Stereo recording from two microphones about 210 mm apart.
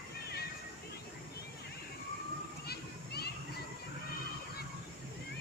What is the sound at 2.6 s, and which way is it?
Children playing, 50° left (ahead or behind).